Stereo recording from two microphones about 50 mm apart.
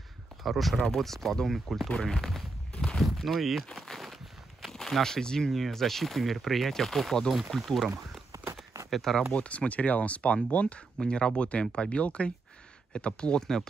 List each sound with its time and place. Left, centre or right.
0.4 s speech: centre
3.0 s a sound: centre
3.7 s walk: centre
5.5 s speech: centre
8.9 s speech: centre
9.3 s speech: left